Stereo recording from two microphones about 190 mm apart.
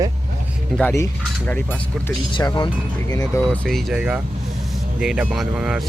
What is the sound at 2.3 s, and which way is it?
Speech, 20° left (ahead or behind).